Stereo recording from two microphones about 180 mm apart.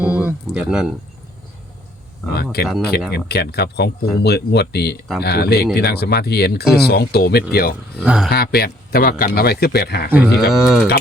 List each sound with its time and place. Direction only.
0.0 s speech: 10° right (ahead or behind)
2.3 s speech: 60° left (ahead or behind)
8.0 s speech: 5° right (ahead or behind)
8.3 s speech: 60° left (ahead or behind)
10.1 s speech: 10° right (ahead or behind)